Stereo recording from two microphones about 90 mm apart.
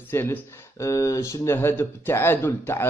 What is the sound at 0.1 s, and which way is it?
Speech, 25° left (ahead or behind).